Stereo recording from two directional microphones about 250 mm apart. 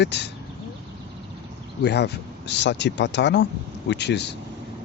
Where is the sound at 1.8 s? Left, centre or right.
Left.